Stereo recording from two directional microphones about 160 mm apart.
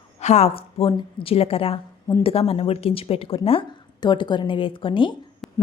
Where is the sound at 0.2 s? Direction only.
45° left (ahead or behind).